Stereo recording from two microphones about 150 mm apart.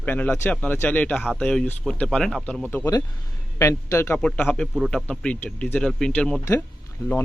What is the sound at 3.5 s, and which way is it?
Speech, 20° left (ahead or behind).